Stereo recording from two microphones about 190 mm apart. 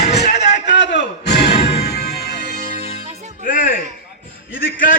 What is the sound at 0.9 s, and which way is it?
Music, 60° left (ahead or behind).